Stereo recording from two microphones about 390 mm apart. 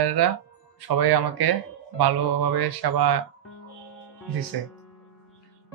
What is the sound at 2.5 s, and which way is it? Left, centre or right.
Speech, right.